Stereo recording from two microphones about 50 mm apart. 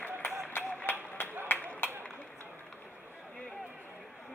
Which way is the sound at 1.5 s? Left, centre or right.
Left.